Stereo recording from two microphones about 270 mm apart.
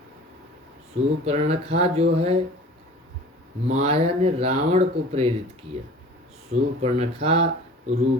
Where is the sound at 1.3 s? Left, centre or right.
Right.